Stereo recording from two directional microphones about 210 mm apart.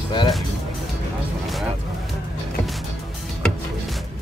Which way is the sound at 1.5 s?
Centre (ahead or behind).